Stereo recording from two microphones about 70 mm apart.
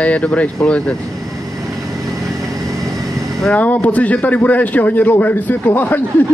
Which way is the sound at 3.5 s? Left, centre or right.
Left.